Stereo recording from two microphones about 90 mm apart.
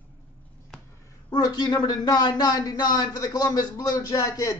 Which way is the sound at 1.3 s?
50° left (ahead or behind).